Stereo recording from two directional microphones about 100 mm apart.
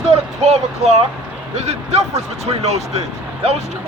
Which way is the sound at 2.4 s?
90° right.